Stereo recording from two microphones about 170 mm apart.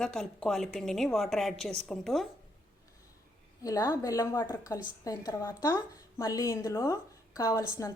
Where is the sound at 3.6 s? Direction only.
20° left (ahead or behind).